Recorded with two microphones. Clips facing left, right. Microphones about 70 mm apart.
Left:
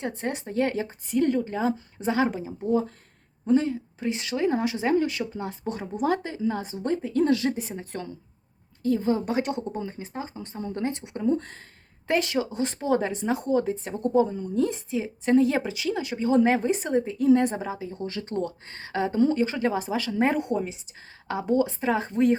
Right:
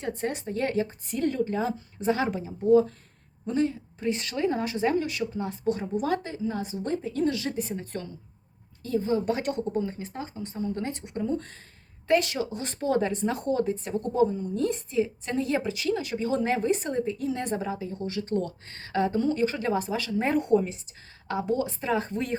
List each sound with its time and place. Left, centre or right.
0.0 s speech: left
4.0 s speech: centre
4.9 s speech: left
6.5 s a woman's voice: left
7.6 s speech: left
8.9 s a woman's voice: left
9.2 s speech: centre
11.2 s a woman's voice: left
20.5 s speech: centre
21.4 s speech: left